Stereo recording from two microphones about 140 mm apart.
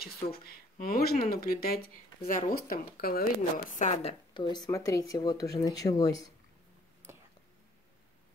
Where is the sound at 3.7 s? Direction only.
55° left (ahead or behind).